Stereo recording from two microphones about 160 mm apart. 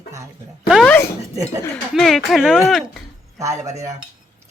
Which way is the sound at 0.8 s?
15° left (ahead or behind).